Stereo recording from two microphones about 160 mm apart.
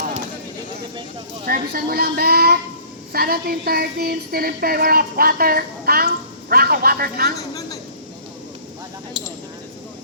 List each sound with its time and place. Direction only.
1.5 s a woman's voice: 70° right (ahead or behind)